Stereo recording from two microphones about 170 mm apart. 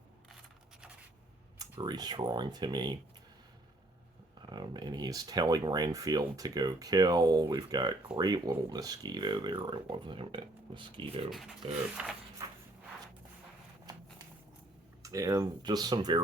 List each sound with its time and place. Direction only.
1.8 s speech: 25° right (ahead or behind)
4.4 s speech: 25° right (ahead or behind)
11.3 s speech: centre (ahead or behind)
13.9 s a sound: 25° right (ahead or behind)
15.0 s speech: 20° right (ahead or behind)